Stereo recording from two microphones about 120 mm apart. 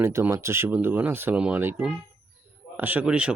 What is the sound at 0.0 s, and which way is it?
Speech, 25° right (ahead or behind).